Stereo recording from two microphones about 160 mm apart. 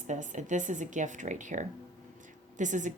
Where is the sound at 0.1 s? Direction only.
50° right (ahead or behind).